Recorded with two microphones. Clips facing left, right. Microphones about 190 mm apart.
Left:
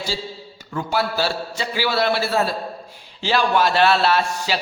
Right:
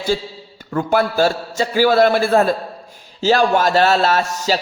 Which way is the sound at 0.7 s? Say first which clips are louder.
Right 6 dB; 55° right (ahead or behind).